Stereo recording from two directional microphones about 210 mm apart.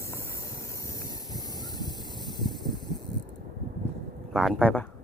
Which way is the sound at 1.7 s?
20° left (ahead or behind).